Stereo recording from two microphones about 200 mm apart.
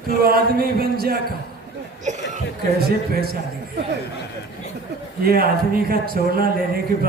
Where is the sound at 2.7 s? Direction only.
50° right (ahead or behind).